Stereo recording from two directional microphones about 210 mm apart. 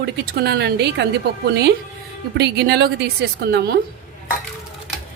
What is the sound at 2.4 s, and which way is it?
A woman's voice, 50° right (ahead or behind).